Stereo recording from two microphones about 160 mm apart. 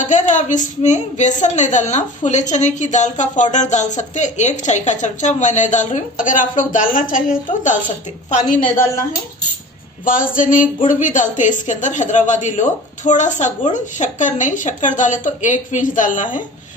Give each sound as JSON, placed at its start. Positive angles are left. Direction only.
{"t": 0.0, "sound": "a woman's voice", "side_deg": 50}
{"t": 10.0, "sound": "a sound", "side_deg": 60}
{"t": 10.9, "sound": "a woman's voice", "side_deg": 55}